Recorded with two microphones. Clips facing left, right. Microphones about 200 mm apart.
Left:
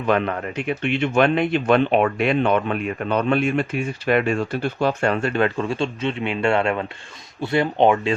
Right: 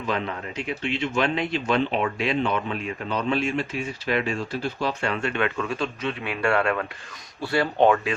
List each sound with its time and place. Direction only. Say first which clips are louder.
0.0 s speech: left 7 dB; 60° left (ahead or behind); by 8.1 s 20° left (ahead or behind)